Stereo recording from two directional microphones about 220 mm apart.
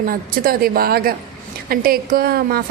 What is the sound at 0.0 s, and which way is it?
A woman's voice, 40° right (ahead or behind).